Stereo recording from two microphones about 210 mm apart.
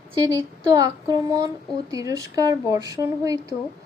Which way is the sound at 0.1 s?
15° right (ahead or behind).